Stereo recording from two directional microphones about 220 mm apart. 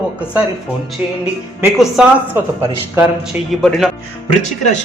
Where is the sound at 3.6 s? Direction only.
Centre (ahead or behind).